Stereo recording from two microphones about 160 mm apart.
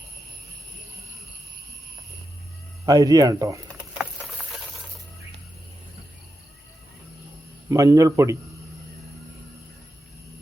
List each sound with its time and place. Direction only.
2.8 s speech: 20° right (ahead or behind)
3.9 s patter: centre (ahead or behind)
7.7 s speech: 20° right (ahead or behind)